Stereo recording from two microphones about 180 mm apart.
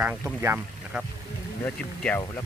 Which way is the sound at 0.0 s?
10° right (ahead or behind).